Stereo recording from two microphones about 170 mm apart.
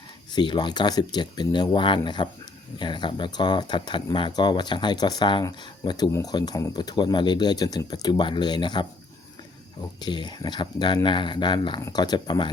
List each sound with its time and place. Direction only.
0.3 s speech: 25° left (ahead or behind)
10.0 s speech: 25° left (ahead or behind)